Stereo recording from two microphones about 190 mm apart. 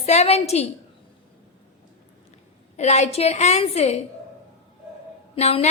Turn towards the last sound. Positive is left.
turn(degrees=35)  # may be behind; listen again after turning